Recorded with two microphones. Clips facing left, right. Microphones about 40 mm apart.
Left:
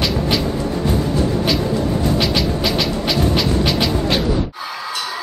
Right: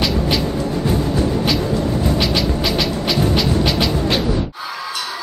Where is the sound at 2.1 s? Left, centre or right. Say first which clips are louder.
Even; centre.